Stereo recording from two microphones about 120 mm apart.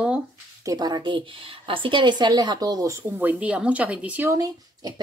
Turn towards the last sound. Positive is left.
turn(degrees=-30)  # may be behind; listen again after turning